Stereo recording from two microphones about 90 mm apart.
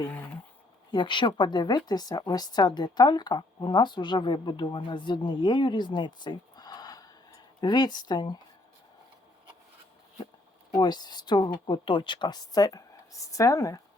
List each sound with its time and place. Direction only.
0.9 s speech: 60° left (ahead or behind)
10.8 s speech: 50° left (ahead or behind)